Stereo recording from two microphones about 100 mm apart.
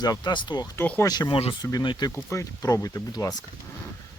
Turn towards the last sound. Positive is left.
turn(degrees=40)  # may be behind; listen again after turning